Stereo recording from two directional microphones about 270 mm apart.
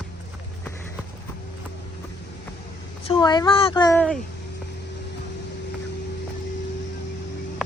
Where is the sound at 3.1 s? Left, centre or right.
Centre.